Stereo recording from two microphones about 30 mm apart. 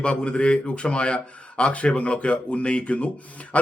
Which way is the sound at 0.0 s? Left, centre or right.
Left.